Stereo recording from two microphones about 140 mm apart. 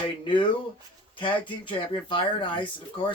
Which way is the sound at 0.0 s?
35° left (ahead or behind).